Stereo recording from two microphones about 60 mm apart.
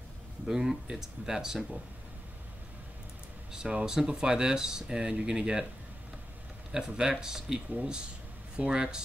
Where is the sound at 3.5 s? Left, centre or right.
Centre.